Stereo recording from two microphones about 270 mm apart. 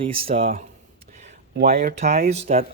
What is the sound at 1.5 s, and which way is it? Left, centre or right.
Speech, right.